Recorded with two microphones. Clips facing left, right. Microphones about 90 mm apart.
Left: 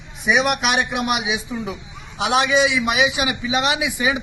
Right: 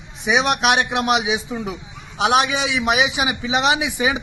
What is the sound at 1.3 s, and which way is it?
A man's voice, 25° right (ahead or behind).